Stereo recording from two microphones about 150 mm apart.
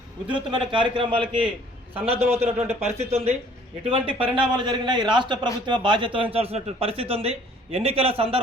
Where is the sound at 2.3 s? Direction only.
45° right (ahead or behind).